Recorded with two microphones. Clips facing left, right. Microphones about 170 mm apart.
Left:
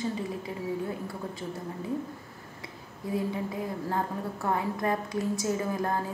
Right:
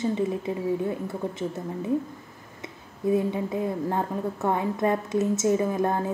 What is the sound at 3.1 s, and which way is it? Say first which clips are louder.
A woman's voice: right 6 dB; 25° right (ahead or behind).